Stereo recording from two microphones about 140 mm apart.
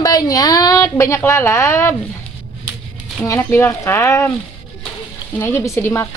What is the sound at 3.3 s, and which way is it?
A woman's voice, 15° left (ahead or behind).